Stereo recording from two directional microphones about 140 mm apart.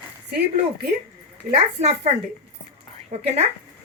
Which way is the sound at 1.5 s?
50° right (ahead or behind).